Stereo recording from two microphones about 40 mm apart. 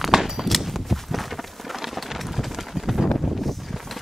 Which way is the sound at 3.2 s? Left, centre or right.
Centre.